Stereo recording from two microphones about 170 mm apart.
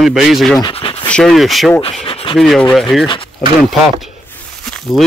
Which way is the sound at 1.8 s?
30° left (ahead or behind).